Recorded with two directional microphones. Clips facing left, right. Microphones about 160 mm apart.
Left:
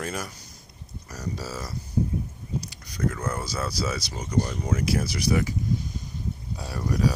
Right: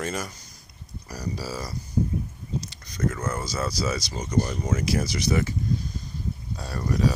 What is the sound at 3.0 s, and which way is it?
Speech, 5° right (ahead or behind).